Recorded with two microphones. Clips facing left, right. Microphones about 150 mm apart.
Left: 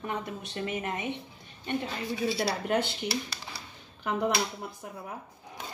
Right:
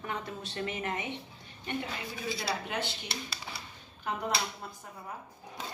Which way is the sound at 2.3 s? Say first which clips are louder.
Left 5 dB; 60° left (ahead or behind).